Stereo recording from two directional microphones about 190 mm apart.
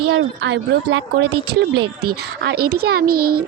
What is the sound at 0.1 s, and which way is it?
Speech, 60° right (ahead or behind).